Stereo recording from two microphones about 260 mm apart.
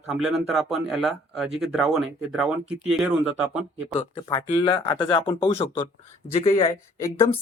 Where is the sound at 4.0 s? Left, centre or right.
Centre.